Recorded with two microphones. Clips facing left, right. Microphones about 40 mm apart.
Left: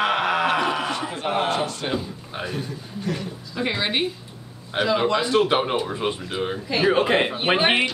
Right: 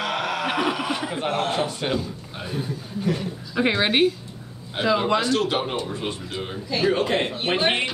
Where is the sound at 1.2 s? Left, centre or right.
Centre.